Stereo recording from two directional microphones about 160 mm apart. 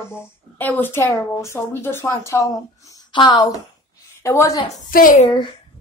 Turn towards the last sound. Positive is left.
turn(degrees=55)  # may be behind; listen again after turning